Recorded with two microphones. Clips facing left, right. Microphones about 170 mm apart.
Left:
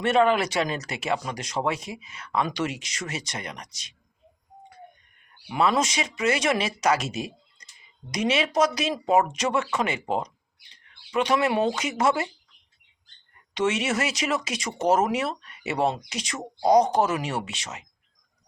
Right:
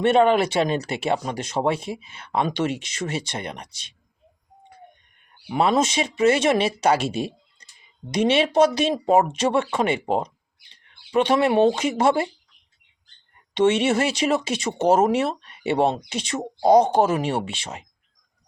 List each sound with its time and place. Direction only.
0.0 s speech: 30° right (ahead or behind)
5.5 s speech: 30° right (ahead or behind)
13.5 s speech: 30° right (ahead or behind)